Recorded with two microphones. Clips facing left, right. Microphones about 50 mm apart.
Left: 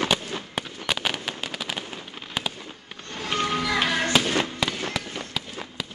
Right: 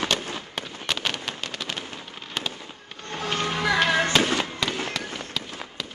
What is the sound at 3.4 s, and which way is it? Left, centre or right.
Music, right.